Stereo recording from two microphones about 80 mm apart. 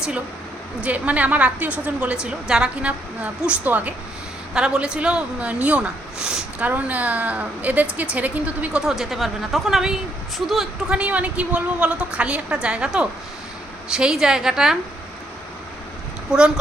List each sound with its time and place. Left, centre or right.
0.8 s speech: centre
8.8 s speech: centre
16.3 s speech: centre